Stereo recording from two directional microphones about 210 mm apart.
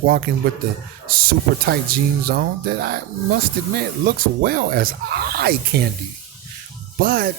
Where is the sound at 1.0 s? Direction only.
45° right (ahead or behind).